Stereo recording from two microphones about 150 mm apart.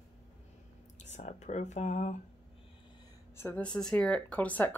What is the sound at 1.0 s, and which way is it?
Speech, 50° left (ahead or behind).